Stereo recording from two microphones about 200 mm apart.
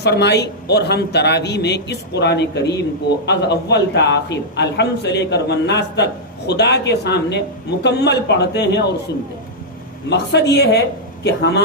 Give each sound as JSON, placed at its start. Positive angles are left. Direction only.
{"t": 0.0, "sound": "a man's voice", "side_deg": 55}
{"t": 10.1, "sound": "a man's voice", "side_deg": 55}